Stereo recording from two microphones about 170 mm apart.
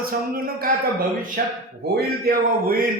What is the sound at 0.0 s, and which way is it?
Speech, 60° right (ahead or behind).